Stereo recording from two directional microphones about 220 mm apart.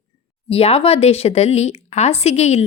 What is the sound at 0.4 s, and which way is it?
A woman's voice, 25° left (ahead or behind).